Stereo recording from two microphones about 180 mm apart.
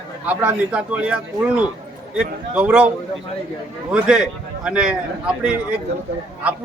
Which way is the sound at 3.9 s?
5° right (ahead or behind).